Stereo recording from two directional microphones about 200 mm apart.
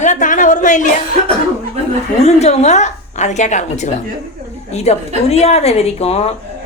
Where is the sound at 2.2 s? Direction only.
35° left (ahead or behind).